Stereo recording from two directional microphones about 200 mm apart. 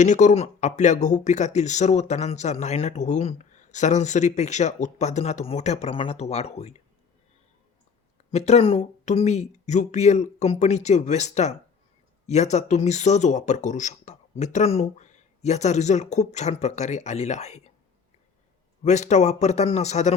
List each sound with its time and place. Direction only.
0.0 s speech: 40° left (ahead or behind)
8.3 s speech: 35° left (ahead or behind)
18.8 s speech: 35° left (ahead or behind)